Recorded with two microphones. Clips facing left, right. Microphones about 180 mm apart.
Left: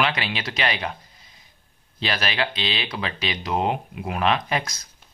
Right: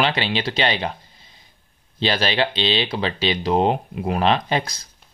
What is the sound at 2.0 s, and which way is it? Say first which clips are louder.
Speech: right 5 dB; 30° right (ahead or behind).